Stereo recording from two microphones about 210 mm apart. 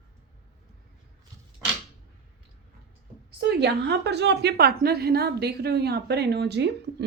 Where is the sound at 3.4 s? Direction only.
50° right (ahead or behind).